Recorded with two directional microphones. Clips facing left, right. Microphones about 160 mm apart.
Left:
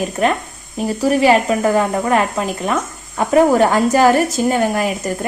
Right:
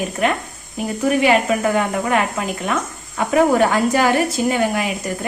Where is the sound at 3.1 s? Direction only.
40° left (ahead or behind).